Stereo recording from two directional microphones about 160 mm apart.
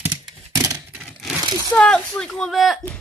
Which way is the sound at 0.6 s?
20° right (ahead or behind).